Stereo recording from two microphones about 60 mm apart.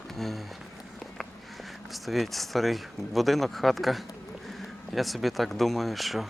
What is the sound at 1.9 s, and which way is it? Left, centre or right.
Speech, centre.